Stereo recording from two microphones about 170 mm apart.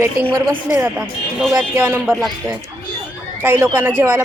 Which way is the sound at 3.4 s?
15° right (ahead or behind).